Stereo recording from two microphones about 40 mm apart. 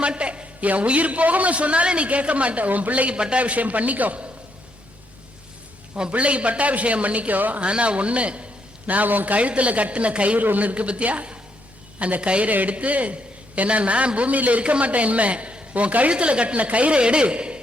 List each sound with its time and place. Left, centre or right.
0.0 s a sound: right
0.7 s a man's voice: right
3.1 s a man's voice: right
6.0 s a man's voice: right
7.6 s a man's voice: right
8.9 s a man's voice: right
10.3 s a man's voice: right
12.5 s a man's voice: right